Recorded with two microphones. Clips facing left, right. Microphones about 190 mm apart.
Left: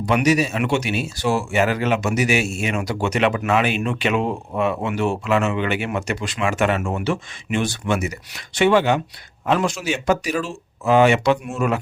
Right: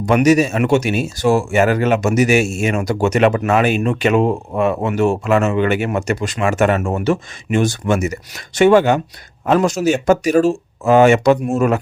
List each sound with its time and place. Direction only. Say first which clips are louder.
0.0 s speech: right 5 dB; 45° right (ahead or behind)